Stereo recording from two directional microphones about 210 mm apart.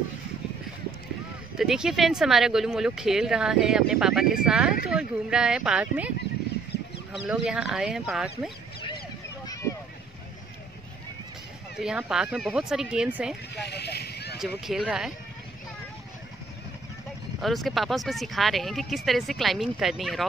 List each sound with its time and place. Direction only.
1.6 s speech: centre (ahead or behind)
11.8 s speech: 5° right (ahead or behind)
13.6 s a sound: 50° left (ahead or behind)
14.4 s speech: centre (ahead or behind)
17.4 s speech: centre (ahead or behind)